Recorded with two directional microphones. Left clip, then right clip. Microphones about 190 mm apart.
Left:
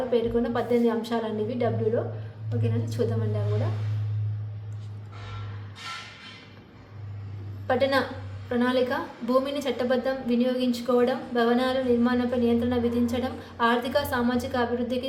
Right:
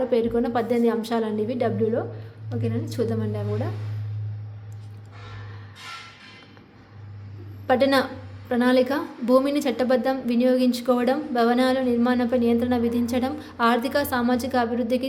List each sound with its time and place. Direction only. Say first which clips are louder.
0.1 s a woman's voice: right 3 dB; 45° right (ahead or behind)
7.7 s a woman's voice: right 4 dB; 45° right (ahead or behind)